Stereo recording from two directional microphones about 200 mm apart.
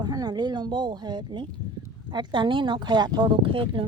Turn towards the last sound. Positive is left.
turn(degrees=-25)  # may be behind; listen again after turning